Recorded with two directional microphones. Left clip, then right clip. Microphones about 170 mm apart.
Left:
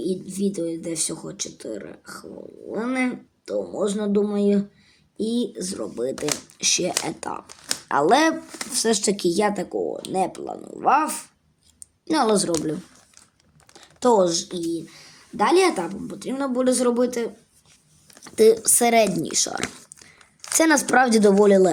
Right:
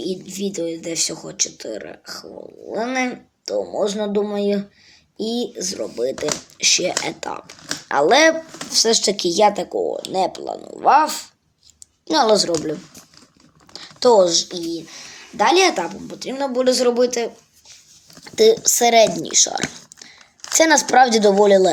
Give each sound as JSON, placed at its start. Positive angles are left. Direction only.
{"t": 0.0, "sound": "speech", "side_deg": 35}
{"t": 13.7, "sound": "a sound", "side_deg": 45}
{"t": 14.4, "sound": "speech", "side_deg": 40}
{"t": 18.3, "sound": "speech", "side_deg": 55}